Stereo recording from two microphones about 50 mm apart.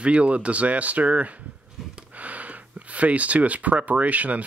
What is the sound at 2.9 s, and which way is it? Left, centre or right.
Speech, right.